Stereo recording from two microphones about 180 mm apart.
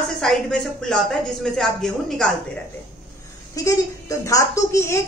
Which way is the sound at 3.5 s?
20° left (ahead or behind).